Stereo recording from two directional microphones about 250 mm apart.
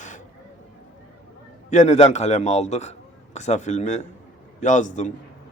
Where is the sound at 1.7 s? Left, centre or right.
Left.